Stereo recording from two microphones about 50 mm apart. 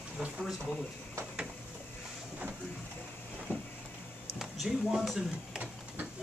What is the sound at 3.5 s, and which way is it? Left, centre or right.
Vehicle, left.